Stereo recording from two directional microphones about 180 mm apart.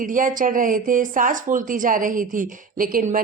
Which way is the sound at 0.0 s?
50° right (ahead or behind).